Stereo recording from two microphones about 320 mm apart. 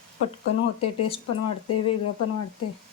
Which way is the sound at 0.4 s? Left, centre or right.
Left.